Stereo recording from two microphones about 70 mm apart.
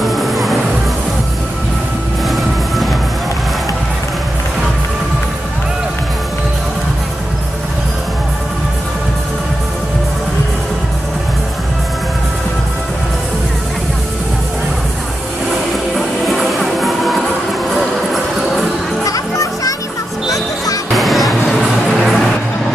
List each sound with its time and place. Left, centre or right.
0.0 s music: centre
2.2 s music: centre
16.3 s music: centre
19.0 s music: left
20.9 s music: centre